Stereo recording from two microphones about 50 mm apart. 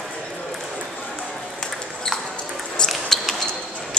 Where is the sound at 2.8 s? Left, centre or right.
Centre.